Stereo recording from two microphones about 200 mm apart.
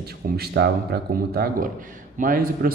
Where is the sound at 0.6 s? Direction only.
55° right (ahead or behind).